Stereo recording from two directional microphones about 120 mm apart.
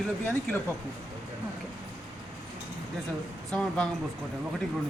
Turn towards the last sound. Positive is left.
turn(degrees=5)  # may be behind; listen again after turning